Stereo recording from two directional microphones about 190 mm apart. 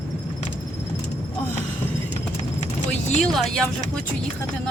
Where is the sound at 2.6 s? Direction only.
40° left (ahead or behind).